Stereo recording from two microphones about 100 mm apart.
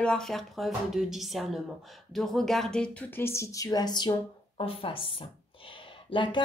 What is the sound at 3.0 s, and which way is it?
A woman's voice, 25° left (ahead or behind).